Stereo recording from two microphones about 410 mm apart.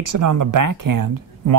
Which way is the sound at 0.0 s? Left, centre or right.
Right.